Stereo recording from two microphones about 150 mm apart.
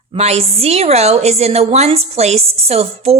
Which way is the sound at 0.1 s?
45° right (ahead or behind).